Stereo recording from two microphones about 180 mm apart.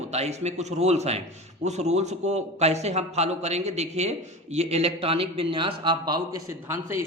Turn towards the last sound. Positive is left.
turn(degrees=-15)  # may be behind; listen again after turning